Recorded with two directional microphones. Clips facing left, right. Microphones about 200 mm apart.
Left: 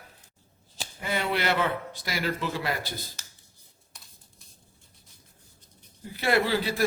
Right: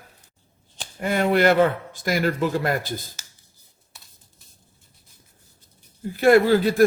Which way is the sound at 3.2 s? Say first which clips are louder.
Right 1 dB; centre (ahead or behind).